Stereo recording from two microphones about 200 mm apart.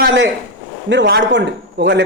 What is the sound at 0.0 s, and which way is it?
A man's voice, 65° right (ahead or behind).